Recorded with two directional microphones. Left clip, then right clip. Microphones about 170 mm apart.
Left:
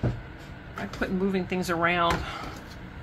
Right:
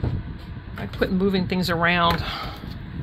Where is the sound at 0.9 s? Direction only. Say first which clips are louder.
Right 6 dB; 70° right (ahead or behind).